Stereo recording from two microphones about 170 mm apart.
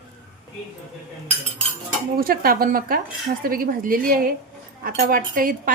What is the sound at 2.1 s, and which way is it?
Speech, 60° right (ahead or behind).